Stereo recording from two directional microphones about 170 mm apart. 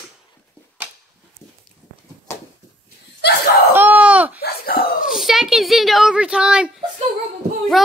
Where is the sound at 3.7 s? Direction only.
10° right (ahead or behind).